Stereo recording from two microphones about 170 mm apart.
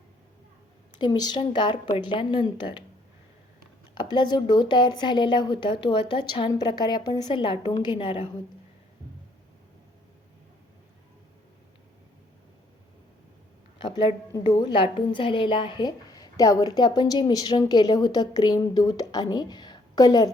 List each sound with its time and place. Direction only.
0.9 s a woman's voice: 25° left (ahead or behind)
3.9 s a woman's voice: 25° left (ahead or behind)
13.7 s a woman's voice: 25° left (ahead or behind)